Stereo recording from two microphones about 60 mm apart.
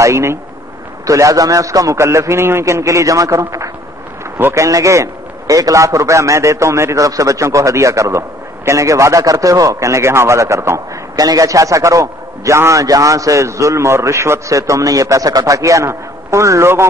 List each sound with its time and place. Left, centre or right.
0.0 s speech: right
1.0 s a man's voice: right
2.6 s a man's voice: right
7.1 s a man's voice: right
11.1 s a man's voice: right
12.8 s a man's voice: right